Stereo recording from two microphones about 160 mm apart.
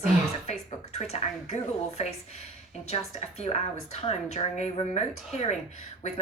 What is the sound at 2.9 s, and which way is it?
Speech, 40° left (ahead or behind).